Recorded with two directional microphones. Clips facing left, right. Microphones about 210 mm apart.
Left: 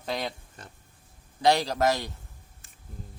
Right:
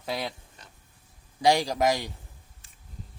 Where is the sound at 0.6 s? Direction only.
50° left (ahead or behind).